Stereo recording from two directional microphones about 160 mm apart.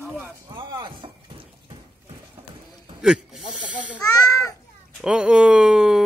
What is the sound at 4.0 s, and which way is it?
Babbling, 25° left (ahead or behind).